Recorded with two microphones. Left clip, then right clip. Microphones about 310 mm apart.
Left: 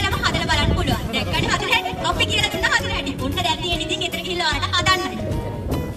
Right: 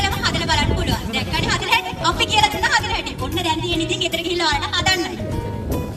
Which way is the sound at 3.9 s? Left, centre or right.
Centre.